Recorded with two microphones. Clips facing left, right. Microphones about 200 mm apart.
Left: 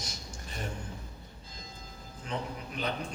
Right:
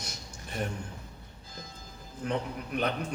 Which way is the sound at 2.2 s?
60° right (ahead or behind).